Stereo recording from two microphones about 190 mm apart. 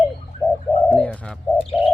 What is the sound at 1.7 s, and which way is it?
Bird, 25° left (ahead or behind).